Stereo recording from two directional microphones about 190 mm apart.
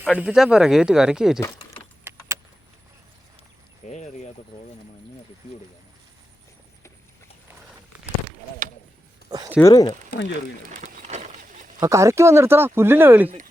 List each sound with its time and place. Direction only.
0.0 s speech: 5° right (ahead or behind)
2.0 s vehicle: 15° right (ahead or behind)
3.8 s a sound: 40° left (ahead or behind)
9.6 s speech: 15° left (ahead or behind)
10.1 s speech: 65° left (ahead or behind)
10.7 s a sound: 40° right (ahead or behind)
11.8 s speech: 15° right (ahead or behind)